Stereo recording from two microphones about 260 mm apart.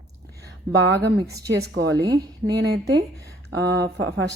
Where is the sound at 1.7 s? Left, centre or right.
Right.